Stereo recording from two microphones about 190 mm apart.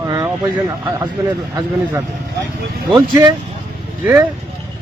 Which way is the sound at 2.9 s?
25° right (ahead or behind).